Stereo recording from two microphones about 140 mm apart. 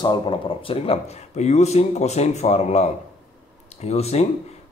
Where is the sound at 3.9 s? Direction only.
50° left (ahead or behind).